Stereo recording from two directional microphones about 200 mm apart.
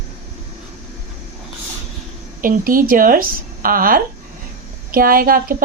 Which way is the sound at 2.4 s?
45° right (ahead or behind).